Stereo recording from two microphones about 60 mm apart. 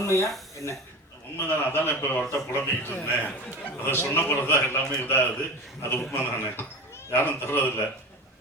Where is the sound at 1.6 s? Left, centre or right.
Left.